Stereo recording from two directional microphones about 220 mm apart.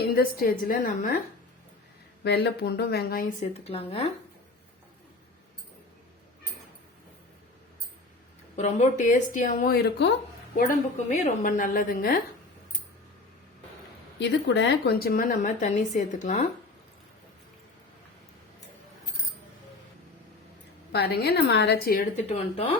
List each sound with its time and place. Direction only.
0.1 s a woman's voice: 45° left (ahead or behind)
2.2 s a woman's voice: 50° left (ahead or behind)
3.4 s speech: 30° left (ahead or behind)
8.5 s a woman's voice: 30° left (ahead or behind); by 10.2 s 50° left (ahead or behind)
10.7 s a woman's voice: 30° left (ahead or behind)
14.2 s a woman's voice: 55° left (ahead or behind); by 16.5 s 35° left (ahead or behind)
20.9 s a woman's voice: 50° left (ahead or behind); by 22.7 s 30° left (ahead or behind)